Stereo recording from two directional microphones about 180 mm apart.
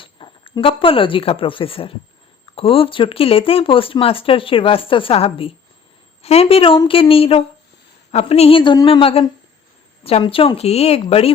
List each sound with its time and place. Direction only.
0.0 s speech: 30° left (ahead or behind)